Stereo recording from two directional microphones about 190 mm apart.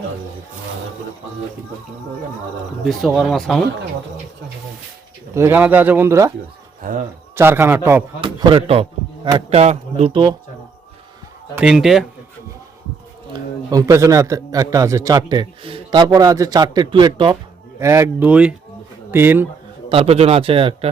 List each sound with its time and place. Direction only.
2.8 s speech: centre (ahead or behind)
5.3 s speech: 10° right (ahead or behind)
6.8 s speech: 45° right (ahead or behind)
7.3 s speech: 10° right (ahead or behind)
8.2 s a man's voice: 25° right (ahead or behind)
11.5 s speech: 5° right (ahead or behind)
13.3 s a man's voice: 20° right (ahead or behind)
19.9 s a man's voice: 30° right (ahead or behind)